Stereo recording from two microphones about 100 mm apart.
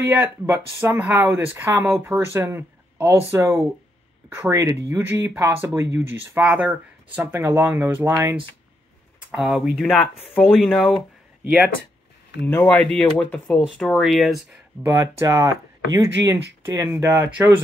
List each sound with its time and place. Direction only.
0.1 s speech: 25° right (ahead or behind)
9.3 s speech: 5° right (ahead or behind)
12.4 s speech: 20° left (ahead or behind)
13.6 s speech: centre (ahead or behind)
14.8 s speech: 30° right (ahead or behind)